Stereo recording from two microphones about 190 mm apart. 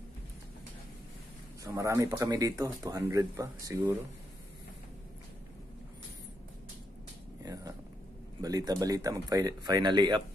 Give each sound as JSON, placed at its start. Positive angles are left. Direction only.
{"t": 1.6, "sound": "speech", "side_deg": -15}
{"t": 7.4, "sound": "a sound", "side_deg": -20}
{"t": 8.4, "sound": "speech", "side_deg": -20}